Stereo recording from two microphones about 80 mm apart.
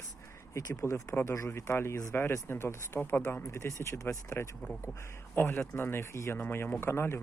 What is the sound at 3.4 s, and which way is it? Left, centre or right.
Speech, left.